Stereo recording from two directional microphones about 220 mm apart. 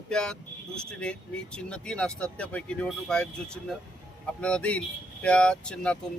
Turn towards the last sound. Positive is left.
turn(degrees=5)  # may be behind; listen again after turning